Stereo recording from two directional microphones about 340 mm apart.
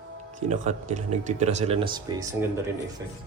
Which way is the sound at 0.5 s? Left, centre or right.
Right.